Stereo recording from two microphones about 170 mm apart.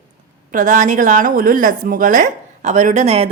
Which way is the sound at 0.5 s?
50° right (ahead or behind).